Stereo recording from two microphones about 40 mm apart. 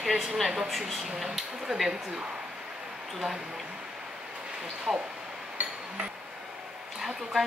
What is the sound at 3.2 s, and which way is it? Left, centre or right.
Speech, centre.